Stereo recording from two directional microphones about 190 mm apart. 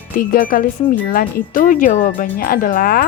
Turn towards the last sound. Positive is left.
turn(degrees=50)  # may be behind; listen again after turning